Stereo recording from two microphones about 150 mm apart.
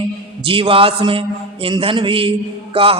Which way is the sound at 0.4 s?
35° right (ahead or behind).